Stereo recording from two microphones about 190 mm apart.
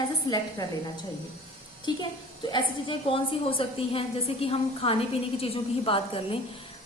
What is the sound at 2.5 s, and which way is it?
A woman's voice, 25° left (ahead or behind).